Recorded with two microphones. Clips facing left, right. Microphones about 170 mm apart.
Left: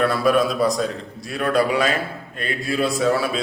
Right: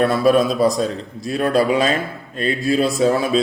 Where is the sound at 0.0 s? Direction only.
25° right (ahead or behind).